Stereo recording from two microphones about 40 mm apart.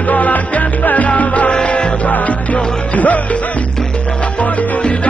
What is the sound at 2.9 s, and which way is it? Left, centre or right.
Music, left.